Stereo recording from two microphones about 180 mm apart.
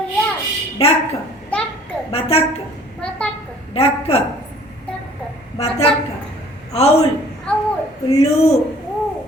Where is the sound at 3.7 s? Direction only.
35° left (ahead or behind).